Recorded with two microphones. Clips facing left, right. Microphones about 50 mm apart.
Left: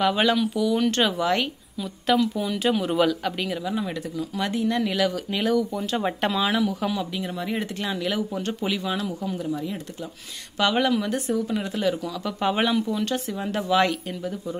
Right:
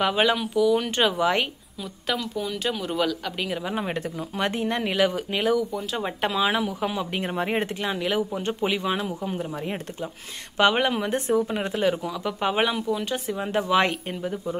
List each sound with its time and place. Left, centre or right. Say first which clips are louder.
0.0 s speech: left 1 dB; centre
1.8 s speech: left 7 dB; centre
3.3 s speech: even; centre
3.6 s speech: even; right
5.4 s speech: left 1 dB; centre
6.4 s speech: even; centre
7.2 s speech: right 3 dB; right
8.0 s speech: right 1 dB; centre